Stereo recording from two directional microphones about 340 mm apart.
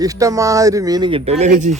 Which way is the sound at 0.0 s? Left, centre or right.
Centre.